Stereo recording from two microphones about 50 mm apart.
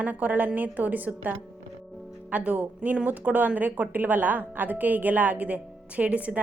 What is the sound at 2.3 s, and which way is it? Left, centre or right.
Speech, right.